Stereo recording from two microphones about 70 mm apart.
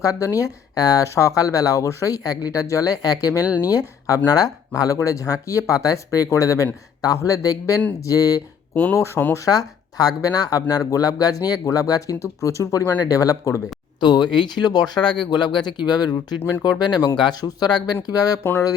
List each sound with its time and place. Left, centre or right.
0.0 s speech: left
1.0 s speech: left
8.7 s speech: left
9.3 s speech: left
14.0 s speech: left